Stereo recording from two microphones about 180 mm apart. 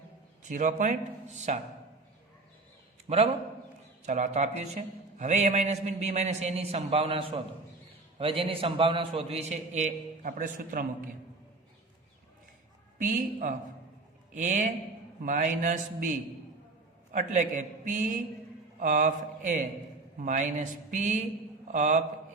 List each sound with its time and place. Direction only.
0.4 s a man's voice: 45° right (ahead or behind)
3.1 s a man's voice: 35° right (ahead or behind); by 11.1 s 50° right (ahead or behind)
13.0 s a man's voice: 45° right (ahead or behind)